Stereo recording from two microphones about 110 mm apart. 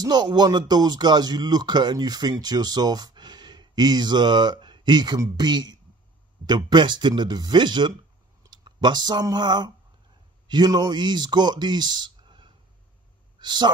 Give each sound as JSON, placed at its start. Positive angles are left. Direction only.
{"t": 0.0, "sound": "speech", "side_deg": -40}